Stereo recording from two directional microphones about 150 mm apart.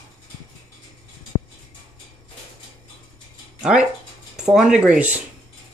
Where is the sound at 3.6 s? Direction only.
5° right (ahead or behind).